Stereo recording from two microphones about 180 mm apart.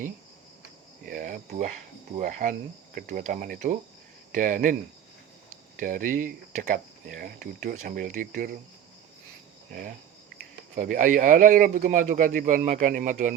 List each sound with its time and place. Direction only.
1.0 s speech: 50° right (ahead or behind)
10.8 s speech: 45° right (ahead or behind)